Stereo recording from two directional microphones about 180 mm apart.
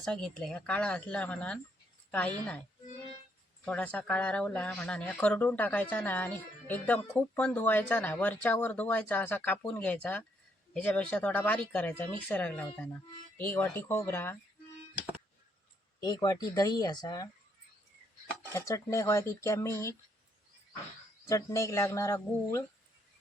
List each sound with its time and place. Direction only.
0.0 s a woman's voice: 5° left (ahead or behind)
3.7 s speech: 10° left (ahead or behind)
16.0 s speech: 20° left (ahead or behind)
18.5 s speech: 15° left (ahead or behind)
21.2 s speech: 15° left (ahead or behind)